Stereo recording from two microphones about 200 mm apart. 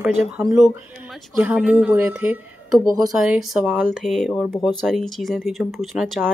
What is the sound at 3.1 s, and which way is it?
Speech, 5° right (ahead or behind).